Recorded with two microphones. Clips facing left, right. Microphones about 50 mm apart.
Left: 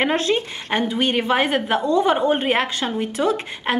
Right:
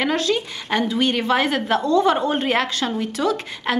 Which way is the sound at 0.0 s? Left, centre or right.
Left.